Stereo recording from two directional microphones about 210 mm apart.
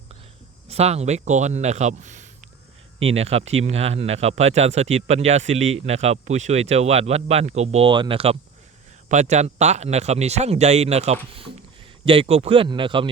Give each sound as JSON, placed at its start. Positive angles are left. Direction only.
{"t": 0.7, "sound": "a man's voice", "side_deg": -30}